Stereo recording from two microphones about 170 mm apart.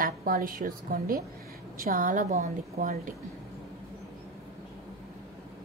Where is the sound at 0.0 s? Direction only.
60° right (ahead or behind).